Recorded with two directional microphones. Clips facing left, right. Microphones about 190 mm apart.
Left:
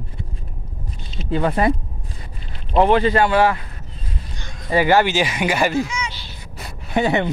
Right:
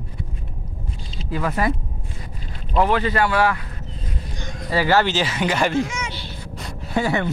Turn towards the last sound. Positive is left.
turn(degrees=20)  # may be behind; listen again after turning